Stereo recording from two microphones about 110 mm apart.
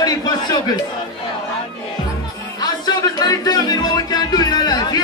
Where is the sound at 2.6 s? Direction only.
35° left (ahead or behind).